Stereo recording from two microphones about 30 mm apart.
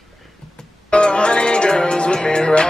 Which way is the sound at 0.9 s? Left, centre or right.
Left.